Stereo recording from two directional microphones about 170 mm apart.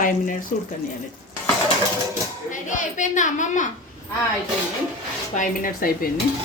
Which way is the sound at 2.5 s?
50° left (ahead or behind).